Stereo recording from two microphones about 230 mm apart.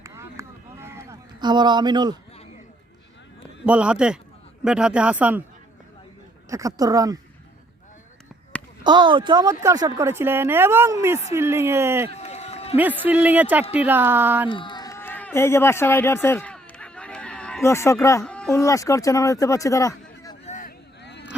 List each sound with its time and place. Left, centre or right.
0.0 s a sound: centre
3.7 s speech: centre
6.5 s a woman's voice: centre
8.8 s a woman's voice: centre
12.1 s run: left
13.0 s a woman's voice: centre
14.4 s a man's voice: left
20.4 s a sound: left
21.0 s a sound: left